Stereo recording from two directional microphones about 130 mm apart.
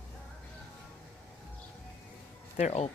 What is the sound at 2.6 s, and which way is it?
Speech, 55° left (ahead or behind).